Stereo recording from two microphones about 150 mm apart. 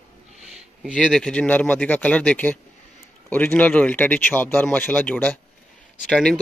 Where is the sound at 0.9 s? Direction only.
5° left (ahead or behind).